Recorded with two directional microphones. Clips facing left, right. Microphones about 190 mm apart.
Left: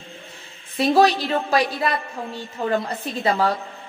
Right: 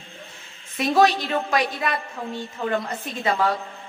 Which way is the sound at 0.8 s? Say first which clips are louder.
Left 2 dB; 30° left (ahead or behind).